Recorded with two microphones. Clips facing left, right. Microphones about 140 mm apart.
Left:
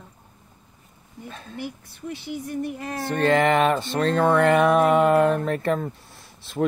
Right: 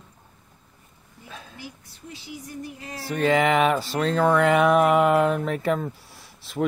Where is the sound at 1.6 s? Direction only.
60° left (ahead or behind).